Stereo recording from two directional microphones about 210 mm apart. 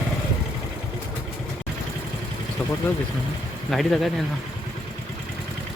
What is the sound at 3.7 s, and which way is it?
Speech, centre (ahead or behind).